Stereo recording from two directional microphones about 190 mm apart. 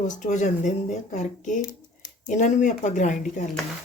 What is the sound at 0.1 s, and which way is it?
A woman's voice, 40° left (ahead or behind).